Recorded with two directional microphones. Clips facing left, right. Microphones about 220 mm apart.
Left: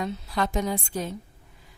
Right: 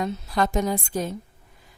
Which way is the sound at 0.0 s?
45° right (ahead or behind).